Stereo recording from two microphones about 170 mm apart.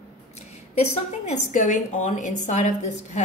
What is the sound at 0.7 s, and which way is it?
A woman's voice, 40° left (ahead or behind).